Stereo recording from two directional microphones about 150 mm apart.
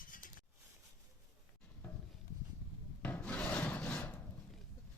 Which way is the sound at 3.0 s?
10° left (ahead or behind).